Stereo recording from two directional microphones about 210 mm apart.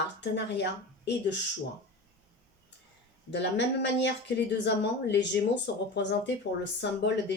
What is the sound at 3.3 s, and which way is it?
Speech, 55° left (ahead or behind).